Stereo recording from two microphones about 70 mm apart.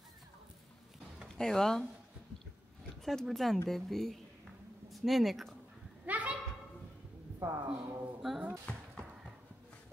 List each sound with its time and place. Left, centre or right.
1.3 s speech: centre
3.1 s speech: centre
6.0 s a sound: right
7.3 s speech: right
8.2 s speech: centre
8.7 s basketball bounce: left